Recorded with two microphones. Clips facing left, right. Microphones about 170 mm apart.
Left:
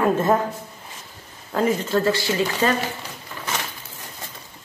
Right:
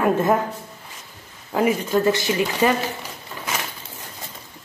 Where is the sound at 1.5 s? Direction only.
10° right (ahead or behind).